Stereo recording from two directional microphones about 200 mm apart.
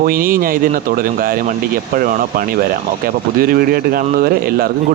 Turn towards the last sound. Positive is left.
turn(degrees=-50)  # may be behind; listen again after turning